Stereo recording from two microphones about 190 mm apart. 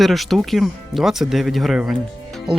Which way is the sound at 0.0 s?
Centre (ahead or behind).